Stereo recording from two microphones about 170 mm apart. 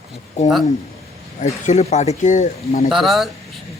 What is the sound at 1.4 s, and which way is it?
Speech, 40° left (ahead or behind).